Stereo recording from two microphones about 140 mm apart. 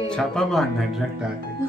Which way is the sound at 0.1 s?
5° left (ahead or behind).